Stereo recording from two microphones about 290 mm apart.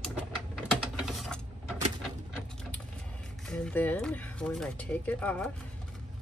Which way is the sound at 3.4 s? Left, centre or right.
Centre.